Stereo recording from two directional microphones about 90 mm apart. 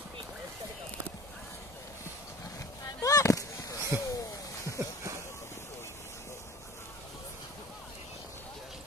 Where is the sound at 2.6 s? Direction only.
35° left (ahead or behind).